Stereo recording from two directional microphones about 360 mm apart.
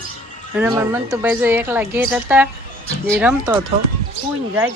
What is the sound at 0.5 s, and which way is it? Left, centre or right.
Speech, centre.